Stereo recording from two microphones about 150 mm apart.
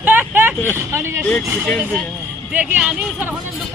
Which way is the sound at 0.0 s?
10° right (ahead or behind).